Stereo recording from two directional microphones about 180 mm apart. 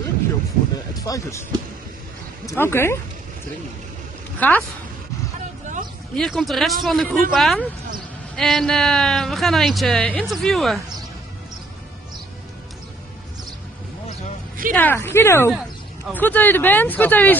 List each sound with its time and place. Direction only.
0.9 s speech: 20° left (ahead or behind)
2.4 s speech: 15° left (ahead or behind)
4.4 s speech: 10° left (ahead or behind)
6.1 s speech: centre (ahead or behind)
14.7 s speech: 10° left (ahead or behind)